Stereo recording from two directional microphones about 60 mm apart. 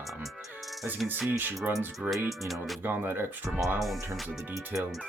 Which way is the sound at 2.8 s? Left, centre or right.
Right.